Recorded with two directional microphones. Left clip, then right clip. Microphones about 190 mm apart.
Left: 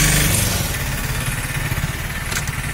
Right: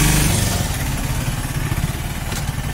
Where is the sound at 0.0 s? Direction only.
45° left (ahead or behind).